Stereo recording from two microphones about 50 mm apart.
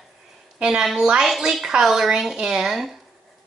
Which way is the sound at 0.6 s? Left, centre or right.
Centre.